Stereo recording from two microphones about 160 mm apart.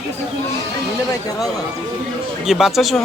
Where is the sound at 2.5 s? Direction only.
Centre (ahead or behind).